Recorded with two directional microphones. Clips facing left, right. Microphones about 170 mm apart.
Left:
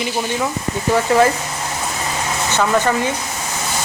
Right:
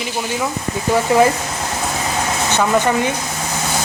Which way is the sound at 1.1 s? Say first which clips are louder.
Right 1 dB; 20° right (ahead or behind).